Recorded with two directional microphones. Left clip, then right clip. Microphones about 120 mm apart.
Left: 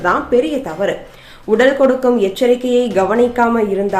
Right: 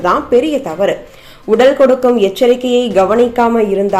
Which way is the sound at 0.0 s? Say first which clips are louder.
Right 3 dB; 25° right (ahead or behind).